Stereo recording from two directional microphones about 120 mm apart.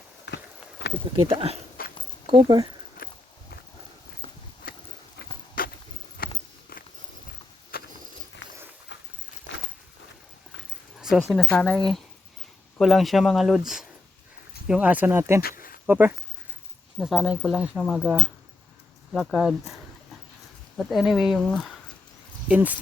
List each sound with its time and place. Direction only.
1.3 s speech: 50° right (ahead or behind)
11.0 s speech: centre (ahead or behind)
11.4 s speech: 15° left (ahead or behind); by 13.6 s centre (ahead or behind)
14.7 s speech: 10° right (ahead or behind)
17.0 s speech: 5° right (ahead or behind)
20.7 s speech: centre (ahead or behind)
22.4 s speech: 15° right (ahead or behind)